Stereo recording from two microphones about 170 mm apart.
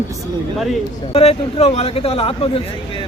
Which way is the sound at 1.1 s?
35° left (ahead or behind).